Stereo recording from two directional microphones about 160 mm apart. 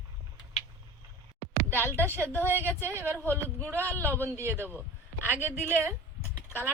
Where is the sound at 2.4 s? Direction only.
15° right (ahead or behind).